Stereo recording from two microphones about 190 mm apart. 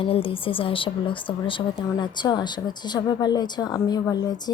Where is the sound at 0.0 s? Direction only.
30° left (ahead or behind).